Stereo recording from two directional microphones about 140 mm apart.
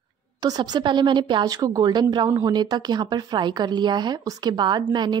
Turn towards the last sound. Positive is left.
turn(degrees=-30)  # may be behind; listen again after turning